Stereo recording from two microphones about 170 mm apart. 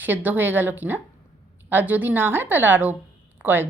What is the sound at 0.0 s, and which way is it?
A woman's voice, 10° right (ahead or behind).